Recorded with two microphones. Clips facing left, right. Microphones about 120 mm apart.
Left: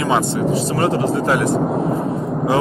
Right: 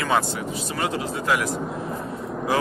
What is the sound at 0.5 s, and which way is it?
Speech, 35° left (ahead or behind).